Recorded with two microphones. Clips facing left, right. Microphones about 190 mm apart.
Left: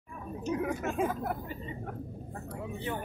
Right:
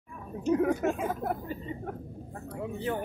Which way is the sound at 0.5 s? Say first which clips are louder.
Right 7 dB; 45° right (ahead or behind).